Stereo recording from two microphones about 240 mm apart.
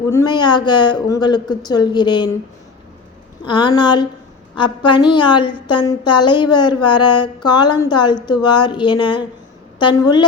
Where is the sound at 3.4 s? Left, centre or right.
Centre.